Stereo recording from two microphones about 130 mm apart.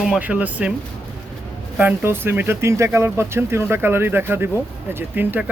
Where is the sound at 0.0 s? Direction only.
5° right (ahead or behind).